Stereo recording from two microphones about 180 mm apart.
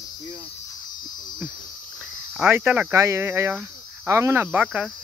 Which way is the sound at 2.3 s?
5° right (ahead or behind).